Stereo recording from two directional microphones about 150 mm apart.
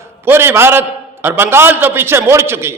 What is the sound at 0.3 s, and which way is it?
A man's voice, 15° right (ahead or behind).